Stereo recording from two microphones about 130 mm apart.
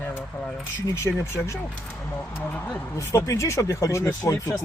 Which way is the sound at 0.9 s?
25° left (ahead or behind).